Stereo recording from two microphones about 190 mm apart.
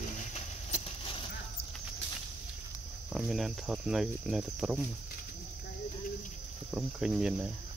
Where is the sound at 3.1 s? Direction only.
Centre (ahead or behind).